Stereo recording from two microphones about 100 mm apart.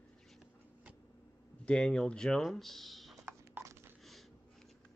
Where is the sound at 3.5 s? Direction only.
25° right (ahead or behind).